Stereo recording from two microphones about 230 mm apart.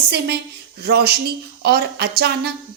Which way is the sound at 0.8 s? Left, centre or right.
Right.